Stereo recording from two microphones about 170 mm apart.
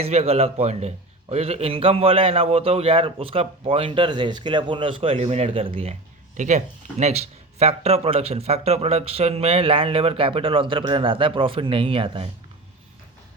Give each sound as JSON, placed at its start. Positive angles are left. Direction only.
{"t": 0.0, "sound": "a man's voice", "side_deg": -35}